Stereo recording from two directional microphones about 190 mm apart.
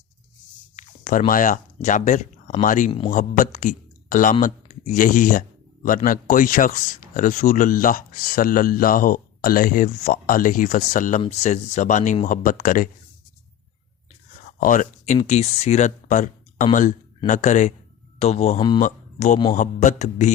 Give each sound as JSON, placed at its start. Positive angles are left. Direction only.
{"t": 0.8, "sound": "a sound", "side_deg": 40}
{"t": 1.3, "sound": "speech", "side_deg": 45}
{"t": 14.6, "sound": "speech", "side_deg": 45}